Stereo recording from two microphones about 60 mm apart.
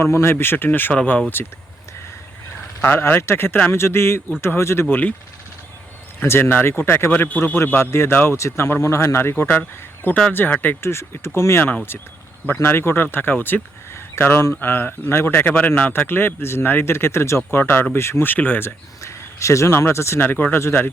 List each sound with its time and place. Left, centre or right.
0.0 s speech: left
2.8 s speech: left
6.2 s speech: left
7.8 s speech: left
9.3 s speech: left
10.8 s speech: left
12.6 s speech: left
15.4 s speech: left
19.0 s speech: left
20.2 s speech: left